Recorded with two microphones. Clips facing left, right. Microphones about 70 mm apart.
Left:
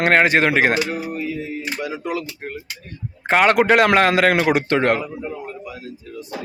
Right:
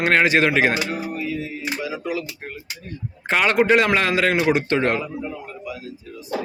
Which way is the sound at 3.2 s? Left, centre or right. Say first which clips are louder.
Left 3 dB; left.